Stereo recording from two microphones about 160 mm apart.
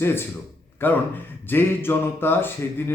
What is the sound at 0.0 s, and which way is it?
A man's voice, 15° left (ahead or behind).